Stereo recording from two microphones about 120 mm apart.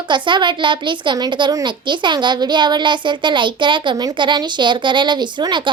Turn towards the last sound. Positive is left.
turn(degrees=-40)  # may be behind; listen again after turning